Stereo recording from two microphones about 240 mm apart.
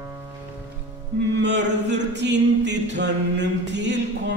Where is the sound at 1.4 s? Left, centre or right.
Right.